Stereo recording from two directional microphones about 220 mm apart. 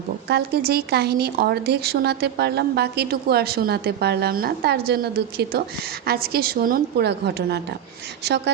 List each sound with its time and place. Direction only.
0.3 s a woman's voice: 45° right (ahead or behind)